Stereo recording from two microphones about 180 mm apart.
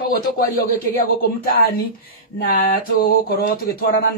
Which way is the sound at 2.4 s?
50° left (ahead or behind).